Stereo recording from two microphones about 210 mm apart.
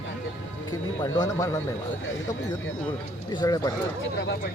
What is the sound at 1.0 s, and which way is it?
Speech, 15° left (ahead or behind).